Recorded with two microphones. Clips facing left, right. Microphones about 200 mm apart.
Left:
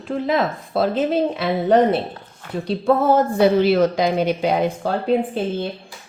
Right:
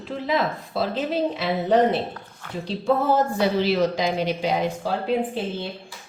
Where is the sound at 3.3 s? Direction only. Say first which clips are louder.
Left 6 dB; 55° left (ahead or behind).